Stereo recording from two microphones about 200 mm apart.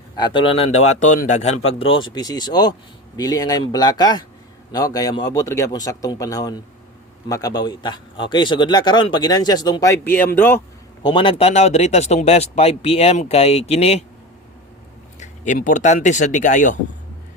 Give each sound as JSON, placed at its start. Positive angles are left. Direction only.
{"t": 0.2, "sound": "a man's voice", "side_deg": 25}
{"t": 11.0, "sound": "speech", "side_deg": 25}
{"t": 15.2, "sound": "speech", "side_deg": 40}